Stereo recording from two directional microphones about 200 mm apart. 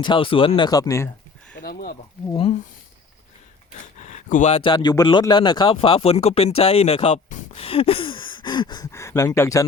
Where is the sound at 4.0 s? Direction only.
40° left (ahead or behind).